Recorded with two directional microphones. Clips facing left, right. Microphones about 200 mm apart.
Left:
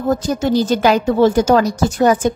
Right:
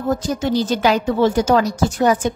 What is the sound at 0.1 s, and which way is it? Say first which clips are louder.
A woman's voice: left 3 dB; 45° left (ahead or behind).